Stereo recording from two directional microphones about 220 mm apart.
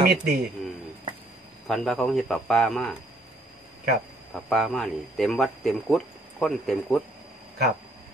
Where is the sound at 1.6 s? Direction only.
Centre (ahead or behind).